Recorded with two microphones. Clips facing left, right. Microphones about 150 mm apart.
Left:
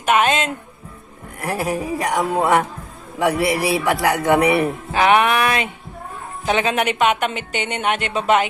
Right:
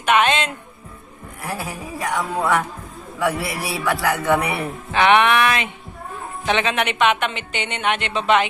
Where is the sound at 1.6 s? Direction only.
80° left.